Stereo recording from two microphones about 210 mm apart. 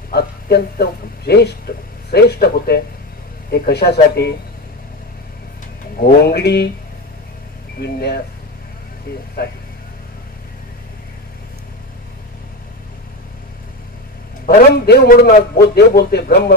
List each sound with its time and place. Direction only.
0.1 s speech: 50° left (ahead or behind)
5.9 s speech: 45° left (ahead or behind)
7.8 s speech: 50° left (ahead or behind)
9.4 s speech: 50° left (ahead or behind)
14.5 s speech: 50° left (ahead or behind)